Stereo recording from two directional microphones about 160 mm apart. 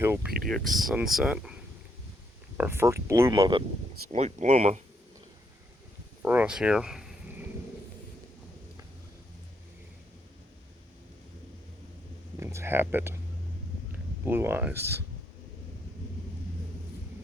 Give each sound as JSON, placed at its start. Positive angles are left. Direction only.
{"t": 0.0, "sound": "speech", "side_deg": -15}
{"t": 0.3, "sound": "speech", "side_deg": 0}
{"t": 4.1, "sound": "speech", "side_deg": -45}
{"t": 6.2, "sound": "speech", "side_deg": -10}
{"t": 12.4, "sound": "speech", "side_deg": -15}
{"t": 14.3, "sound": "speech", "side_deg": -15}